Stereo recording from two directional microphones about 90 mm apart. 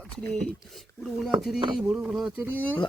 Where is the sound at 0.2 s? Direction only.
10° left (ahead or behind); by 2.3 s 5° right (ahead or behind).